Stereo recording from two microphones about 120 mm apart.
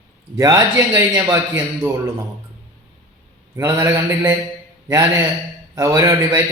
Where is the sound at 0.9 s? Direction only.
25° right (ahead or behind).